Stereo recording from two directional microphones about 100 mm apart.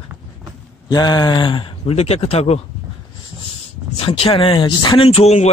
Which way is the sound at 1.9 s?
90° left.